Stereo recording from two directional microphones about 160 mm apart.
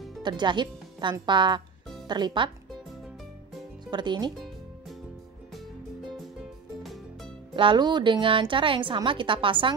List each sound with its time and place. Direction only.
0.2 s speech: 30° right (ahead or behind)
3.9 s speech: 30° right (ahead or behind)
6.8 s music: centre (ahead or behind)
7.5 s a woman's voice: 30° right (ahead or behind)